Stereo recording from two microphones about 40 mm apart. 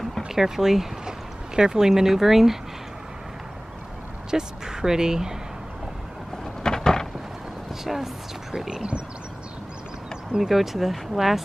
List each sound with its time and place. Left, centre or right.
0.3 s speech: centre
4.3 s speech: centre
6.6 s a sound: centre
7.8 s speech: centre
10.4 s speech: centre